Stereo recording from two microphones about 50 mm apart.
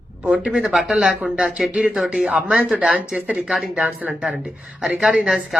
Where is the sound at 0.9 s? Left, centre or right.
Centre.